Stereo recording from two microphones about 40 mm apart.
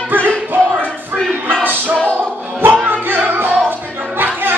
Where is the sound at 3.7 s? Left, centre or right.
Right.